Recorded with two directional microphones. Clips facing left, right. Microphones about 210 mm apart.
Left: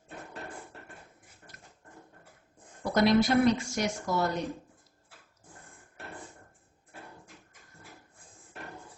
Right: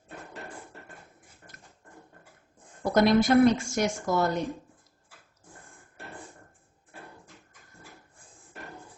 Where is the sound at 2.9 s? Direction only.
50° right (ahead or behind).